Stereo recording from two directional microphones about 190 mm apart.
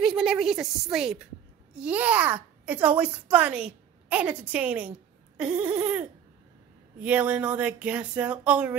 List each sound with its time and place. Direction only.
0.0 s a child's voice: centre (ahead or behind)